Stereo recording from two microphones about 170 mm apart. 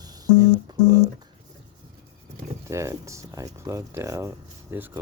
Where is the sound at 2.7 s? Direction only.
15° right (ahead or behind).